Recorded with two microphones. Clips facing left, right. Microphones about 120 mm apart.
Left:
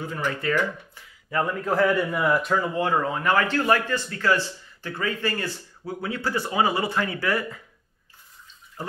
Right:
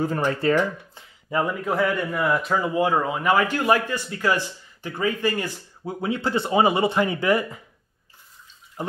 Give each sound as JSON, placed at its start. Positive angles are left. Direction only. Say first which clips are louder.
{"t": 0.0, "sound": "speech", "louder": "right 6 dB", "side_deg": -35}
{"t": 1.5, "sound": "a man's voice", "louder": "left 5 dB", "side_deg": -5}
{"t": 2.5, "sound": "speech", "louder": "right 2 dB", "side_deg": -10}